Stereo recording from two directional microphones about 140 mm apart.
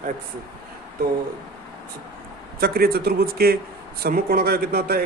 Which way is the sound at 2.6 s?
90° right.